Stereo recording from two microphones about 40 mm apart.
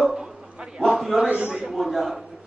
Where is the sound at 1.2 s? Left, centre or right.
Right.